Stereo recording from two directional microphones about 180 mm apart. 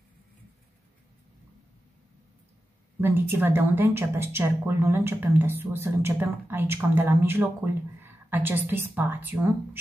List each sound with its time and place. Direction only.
3.0 s a woman's voice: 10° right (ahead or behind)